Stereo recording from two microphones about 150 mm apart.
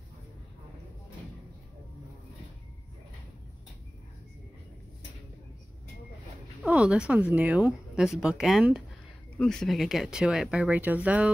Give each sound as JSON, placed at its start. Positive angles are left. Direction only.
{"t": 6.6, "sound": "speech", "side_deg": -5}